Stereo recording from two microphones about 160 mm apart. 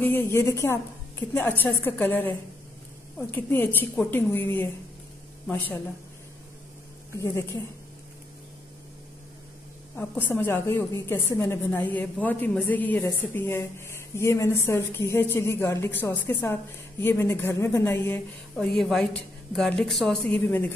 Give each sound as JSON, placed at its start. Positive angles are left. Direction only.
{"t": 0.0, "sound": "a woman's voice", "side_deg": 15}
{"t": 7.2, "sound": "a woman's voice", "side_deg": 20}
{"t": 9.9, "sound": "a woman's voice", "side_deg": 15}